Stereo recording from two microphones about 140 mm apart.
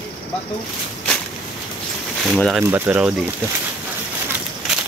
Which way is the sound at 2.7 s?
15° right (ahead or behind).